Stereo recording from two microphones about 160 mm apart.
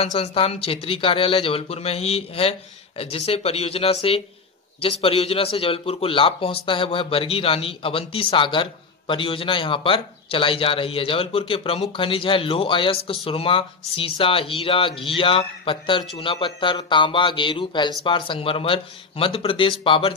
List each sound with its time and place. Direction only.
0.0 s speech: 40° left (ahead or behind)